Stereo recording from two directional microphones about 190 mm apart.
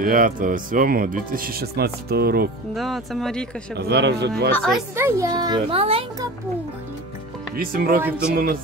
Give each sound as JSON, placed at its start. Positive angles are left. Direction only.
{"t": 0.0, "sound": "speech", "side_deg": -45}
{"t": 2.7, "sound": "speech", "side_deg": 0}
{"t": 3.7, "sound": "speech", "side_deg": -60}
{"t": 4.5, "sound": "speech", "side_deg": 10}
{"t": 4.9, "sound": "speech", "side_deg": -15}
{"t": 7.5, "sound": "speech", "side_deg": -50}
{"t": 8.0, "sound": "speech", "side_deg": -5}